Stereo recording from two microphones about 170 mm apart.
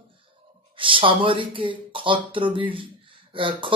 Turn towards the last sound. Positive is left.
turn(degrees=-30)  # may be behind; listen again after turning